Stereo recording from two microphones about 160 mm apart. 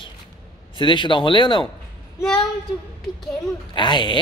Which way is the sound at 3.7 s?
30° left (ahead or behind).